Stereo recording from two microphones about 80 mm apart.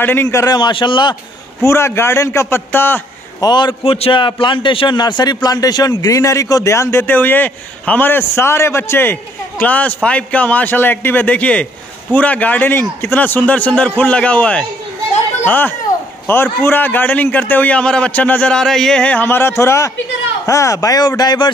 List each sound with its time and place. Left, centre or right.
0.0 s a man's voice: left
0.5 s a man's voice: left
1.6 s a man's voice: left
3.3 s a man's voice: left